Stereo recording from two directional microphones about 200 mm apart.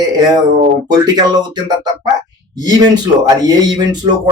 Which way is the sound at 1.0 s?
20° right (ahead or behind).